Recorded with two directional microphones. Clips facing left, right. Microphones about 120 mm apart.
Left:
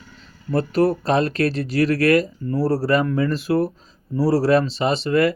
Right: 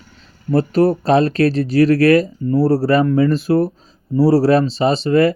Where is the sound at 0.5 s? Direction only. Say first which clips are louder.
Right 4 dB; 25° right (ahead or behind).